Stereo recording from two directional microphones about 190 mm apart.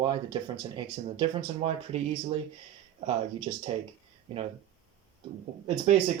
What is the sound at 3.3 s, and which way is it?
Speech, 25° right (ahead or behind).